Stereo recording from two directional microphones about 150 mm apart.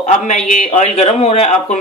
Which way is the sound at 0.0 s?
50° left (ahead or behind).